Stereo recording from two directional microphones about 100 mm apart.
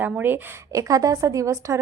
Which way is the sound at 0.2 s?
20° right (ahead or behind).